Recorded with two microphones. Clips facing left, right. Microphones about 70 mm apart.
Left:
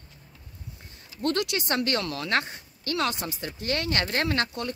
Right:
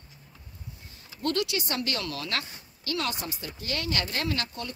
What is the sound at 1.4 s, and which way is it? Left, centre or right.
Speech, left.